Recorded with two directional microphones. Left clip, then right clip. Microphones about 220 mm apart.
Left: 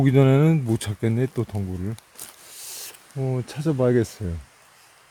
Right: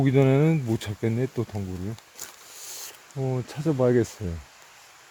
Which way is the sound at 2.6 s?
10° left (ahead or behind).